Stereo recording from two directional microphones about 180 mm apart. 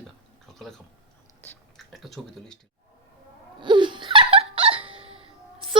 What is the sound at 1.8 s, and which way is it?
Speech, centre (ahead or behind).